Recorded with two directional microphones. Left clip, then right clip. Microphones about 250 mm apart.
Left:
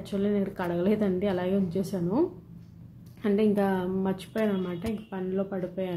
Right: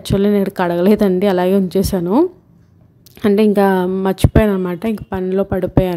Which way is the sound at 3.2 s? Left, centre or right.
Right.